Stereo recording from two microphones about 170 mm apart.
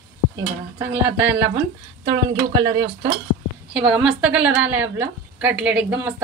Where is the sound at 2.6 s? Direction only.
90° right.